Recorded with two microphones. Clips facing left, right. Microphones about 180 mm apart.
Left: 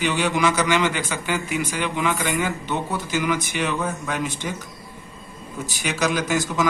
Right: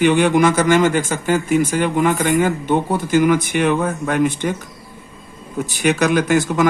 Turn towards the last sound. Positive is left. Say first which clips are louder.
# right 7 dB
turn(degrees=-55)  # may be behind; listen again after turning